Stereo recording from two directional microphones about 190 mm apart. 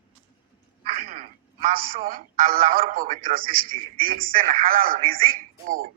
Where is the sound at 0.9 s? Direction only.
45° right (ahead or behind).